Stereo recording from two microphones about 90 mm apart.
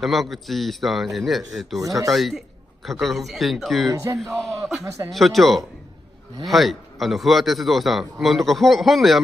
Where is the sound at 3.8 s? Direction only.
35° right (ahead or behind).